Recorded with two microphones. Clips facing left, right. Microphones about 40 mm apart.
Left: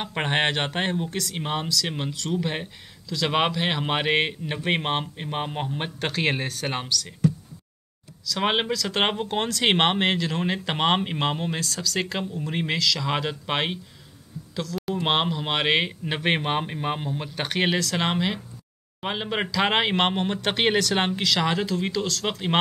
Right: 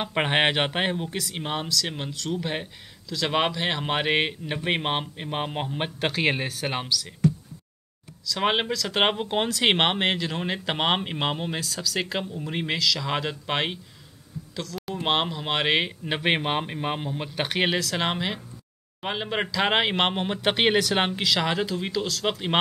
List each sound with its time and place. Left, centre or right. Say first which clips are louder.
0.0 s speech: right 2 dB; centre